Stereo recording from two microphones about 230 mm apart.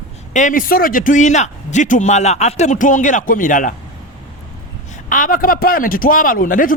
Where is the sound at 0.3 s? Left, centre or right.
Left.